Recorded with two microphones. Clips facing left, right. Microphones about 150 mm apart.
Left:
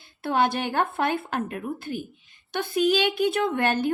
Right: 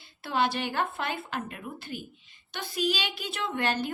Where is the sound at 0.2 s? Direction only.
50° left (ahead or behind).